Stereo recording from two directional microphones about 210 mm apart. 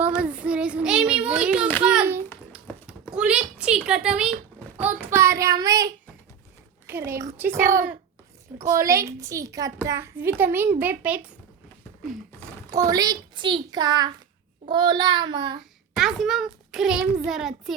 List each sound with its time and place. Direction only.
0.0 s child singing: 5° right (ahead or behind)
1.8 s a sound: 5° right (ahead or behind)
5.1 s child singing: 15° right (ahead or behind)
6.8 s a child's voice: 10° right (ahead or behind)
12.7 s a child's voice: 15° right (ahead or behind)
16.0 s a child's voice: centre (ahead or behind)